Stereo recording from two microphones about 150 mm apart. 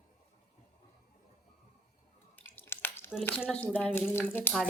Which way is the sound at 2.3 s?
15° left (ahead or behind).